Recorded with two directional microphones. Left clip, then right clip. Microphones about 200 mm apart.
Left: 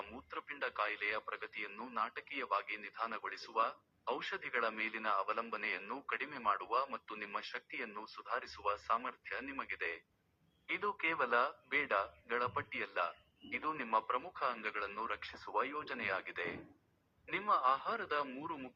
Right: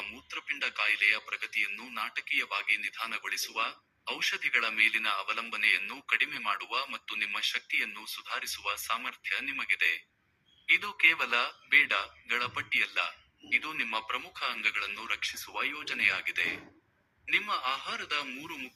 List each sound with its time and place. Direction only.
0.0 s a man's voice: 35° right (ahead or behind)